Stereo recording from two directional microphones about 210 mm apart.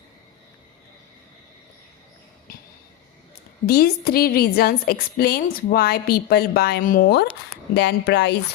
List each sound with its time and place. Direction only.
3.7 s a woman's voice: 45° left (ahead or behind)